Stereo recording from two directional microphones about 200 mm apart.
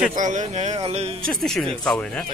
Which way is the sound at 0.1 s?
40° right (ahead or behind).